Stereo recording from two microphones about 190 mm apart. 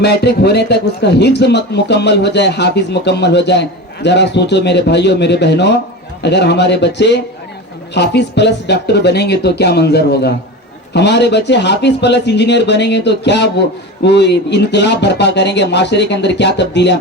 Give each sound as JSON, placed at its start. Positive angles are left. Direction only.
{"t": 0.0, "sound": "a man's voice", "side_deg": 60}